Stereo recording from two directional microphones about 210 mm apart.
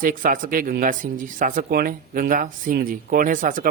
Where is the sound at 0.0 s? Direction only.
40° right (ahead or behind).